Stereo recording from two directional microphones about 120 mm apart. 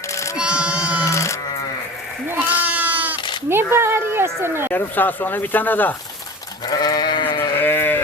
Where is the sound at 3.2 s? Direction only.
40° left (ahead or behind).